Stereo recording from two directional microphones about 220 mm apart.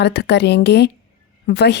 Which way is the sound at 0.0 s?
50° left (ahead or behind).